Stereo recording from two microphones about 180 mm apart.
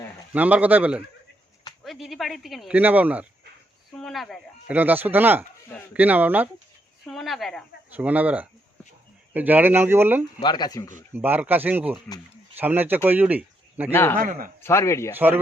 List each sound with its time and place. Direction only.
0.3 s speech: 10° right (ahead or behind)
4.7 s speech: 10° right (ahead or behind)
7.0 s speech: centre (ahead or behind)
10.4 s speech: 25° left (ahead or behind)
11.1 s speech: 10° right (ahead or behind)
13.9 s speech: 10° left (ahead or behind)
14.2 s speech: 50° right (ahead or behind)
14.6 s speech: 15° left (ahead or behind)
15.1 s speech: 10° right (ahead or behind)